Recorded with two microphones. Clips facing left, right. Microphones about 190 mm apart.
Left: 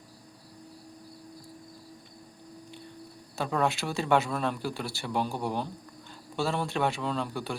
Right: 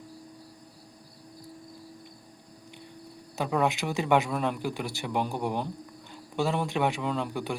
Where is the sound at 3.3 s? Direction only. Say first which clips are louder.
Right 1 dB; 15° right (ahead or behind).